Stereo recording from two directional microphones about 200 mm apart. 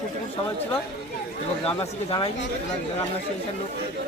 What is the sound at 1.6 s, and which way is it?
Speech, 30° left (ahead or behind).